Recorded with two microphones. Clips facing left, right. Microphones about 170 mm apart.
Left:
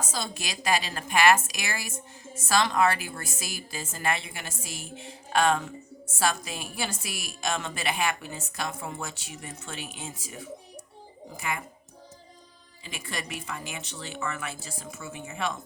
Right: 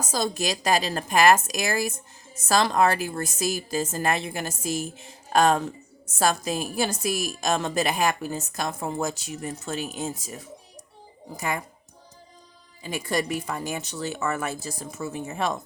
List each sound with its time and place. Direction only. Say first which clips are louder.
0.0 s a woman's voice: right 8 dB; 40° right (ahead or behind)
12.8 s a woman's voice: right 10 dB; 40° right (ahead or behind)